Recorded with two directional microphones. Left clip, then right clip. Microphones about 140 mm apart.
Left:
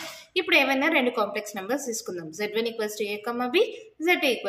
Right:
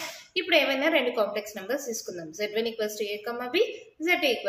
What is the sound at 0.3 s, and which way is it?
A woman's voice, 40° left (ahead or behind).